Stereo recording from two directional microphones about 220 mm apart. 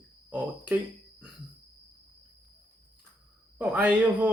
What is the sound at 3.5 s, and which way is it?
Speech, 5° right (ahead or behind).